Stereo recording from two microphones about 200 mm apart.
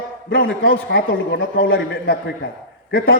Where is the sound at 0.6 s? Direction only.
50° left (ahead or behind).